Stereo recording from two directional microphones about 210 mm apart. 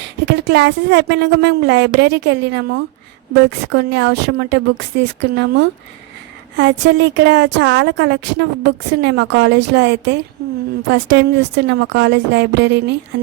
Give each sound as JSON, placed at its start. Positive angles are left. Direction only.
{"t": 0.3, "sound": "a woman's voice", "side_deg": -55}